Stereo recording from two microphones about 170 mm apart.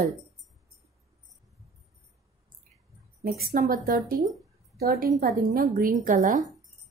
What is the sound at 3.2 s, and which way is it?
Speech, 60° right (ahead or behind).